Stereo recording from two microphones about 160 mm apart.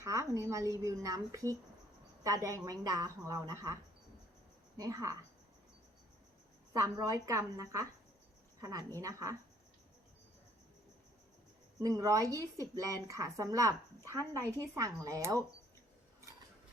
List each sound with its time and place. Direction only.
0.0 s speech: 20° right (ahead or behind)
4.8 s speech: 20° right (ahead or behind)
6.7 s speech: 20° right (ahead or behind)
9.0 s speech: 20° right (ahead or behind)
11.8 s speech: 20° right (ahead or behind)